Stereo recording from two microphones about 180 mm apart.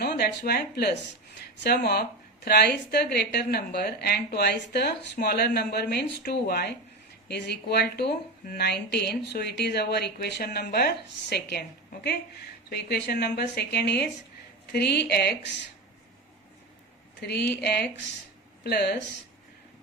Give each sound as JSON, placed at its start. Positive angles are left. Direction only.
{"t": 0.0, "sound": "a woman's voice", "side_deg": 65}
{"t": 12.7, "sound": "a woman's voice", "side_deg": 65}
{"t": 17.2, "sound": "a woman's voice", "side_deg": 70}